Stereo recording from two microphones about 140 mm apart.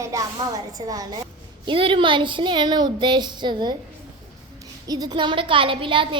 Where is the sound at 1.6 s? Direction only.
40° right (ahead or behind).